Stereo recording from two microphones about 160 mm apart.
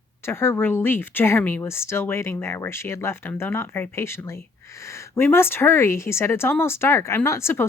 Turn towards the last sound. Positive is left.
turn(degrees=15)  # may be behind; listen again after turning